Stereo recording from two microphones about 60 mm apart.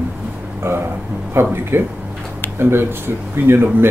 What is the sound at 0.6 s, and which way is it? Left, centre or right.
A man's voice, right.